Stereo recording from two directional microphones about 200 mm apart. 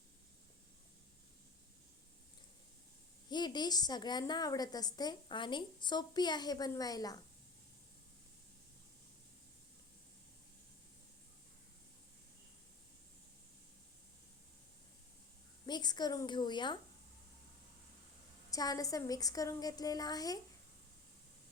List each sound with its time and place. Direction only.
3.2 s a woman's voice: 20° left (ahead or behind)
15.6 s a woman's voice: 20° left (ahead or behind)
18.5 s a woman's voice: 20° left (ahead or behind)